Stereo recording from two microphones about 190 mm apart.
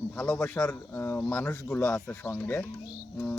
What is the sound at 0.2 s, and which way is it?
Speech, 5° left (ahead or behind).